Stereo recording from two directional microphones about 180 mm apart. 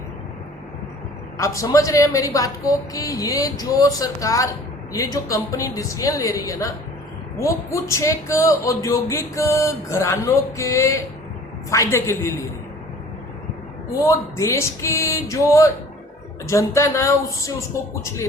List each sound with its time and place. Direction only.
1.4 s speech: 15° left (ahead or behind)
14.0 s speech: 15° left (ahead or behind)